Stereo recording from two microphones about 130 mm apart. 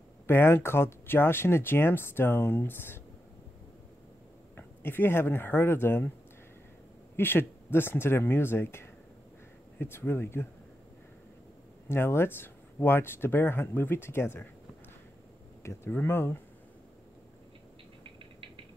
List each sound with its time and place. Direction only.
0.3 s speech: 20° left (ahead or behind)
4.6 s speech: 15° left (ahead or behind)
7.2 s speech: 15° left (ahead or behind)
11.9 s speech: 20° left (ahead or behind)
15.6 s speech: 20° left (ahead or behind)